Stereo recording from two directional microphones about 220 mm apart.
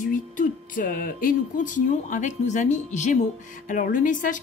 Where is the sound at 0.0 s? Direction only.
35° left (ahead or behind).